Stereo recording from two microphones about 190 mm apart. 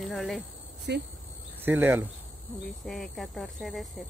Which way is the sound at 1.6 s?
10° right (ahead or behind).